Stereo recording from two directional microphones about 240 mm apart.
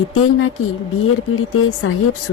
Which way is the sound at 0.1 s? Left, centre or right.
Left.